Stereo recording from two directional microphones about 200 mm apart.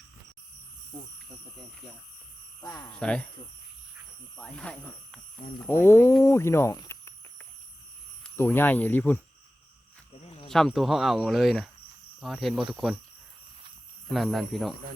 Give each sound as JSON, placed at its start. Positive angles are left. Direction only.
{"t": 2.6, "sound": "speech", "side_deg": 15}
{"t": 2.9, "sound": "speech", "side_deg": 5}
{"t": 4.4, "sound": "speech", "side_deg": 5}
{"t": 8.2, "sound": "speech", "side_deg": 10}
{"t": 10.2, "sound": "a sound", "side_deg": 30}
{"t": 10.5, "sound": "speech", "side_deg": 0}
{"t": 14.1, "sound": "speech", "side_deg": 0}